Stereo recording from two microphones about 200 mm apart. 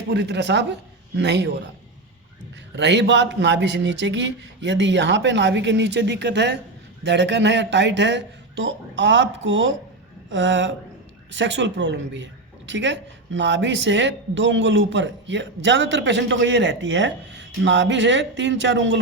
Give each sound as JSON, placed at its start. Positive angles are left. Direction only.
{"t": 0.1, "sound": "speech", "side_deg": -60}
{"t": 2.7, "sound": "a woman's voice", "side_deg": -60}